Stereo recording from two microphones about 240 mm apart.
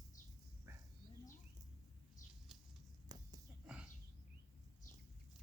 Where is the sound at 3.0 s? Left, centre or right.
Centre.